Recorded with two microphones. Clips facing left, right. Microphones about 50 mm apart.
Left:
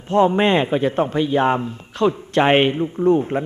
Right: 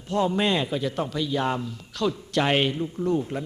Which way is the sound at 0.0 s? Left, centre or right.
Left.